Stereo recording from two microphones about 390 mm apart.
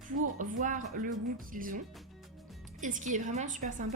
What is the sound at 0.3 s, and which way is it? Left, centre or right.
A woman's voice, centre.